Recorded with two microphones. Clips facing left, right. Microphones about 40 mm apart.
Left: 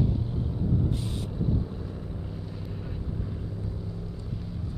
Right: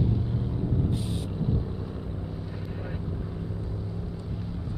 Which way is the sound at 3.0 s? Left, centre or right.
Centre.